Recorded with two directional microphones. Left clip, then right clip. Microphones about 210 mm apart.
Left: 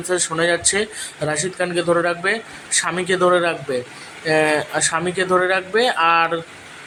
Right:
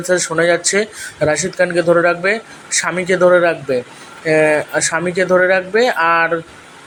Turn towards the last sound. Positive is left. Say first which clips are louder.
# right 3 dB
turn(degrees=-10)  # may be behind; listen again after turning